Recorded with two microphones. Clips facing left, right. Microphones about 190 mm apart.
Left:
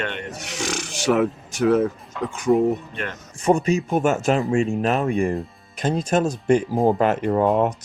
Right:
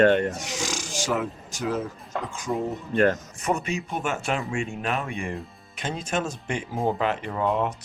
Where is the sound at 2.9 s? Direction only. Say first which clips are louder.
Right 10 dB; 40° right (ahead or behind).